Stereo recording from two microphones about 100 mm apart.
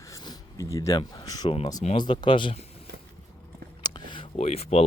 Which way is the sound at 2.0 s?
55° left (ahead or behind).